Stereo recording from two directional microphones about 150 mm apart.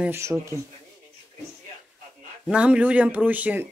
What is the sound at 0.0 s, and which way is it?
Speech, 15° right (ahead or behind).